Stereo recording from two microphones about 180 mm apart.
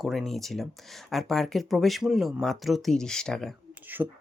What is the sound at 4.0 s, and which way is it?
Speech, 15° right (ahead or behind).